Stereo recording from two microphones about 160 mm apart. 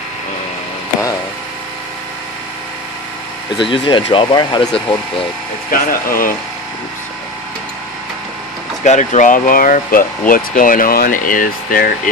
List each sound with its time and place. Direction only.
3.5 s speech: 30° left (ahead or behind)
5.7 s speech: 60° left (ahead or behind)
8.8 s speech: 50° left (ahead or behind)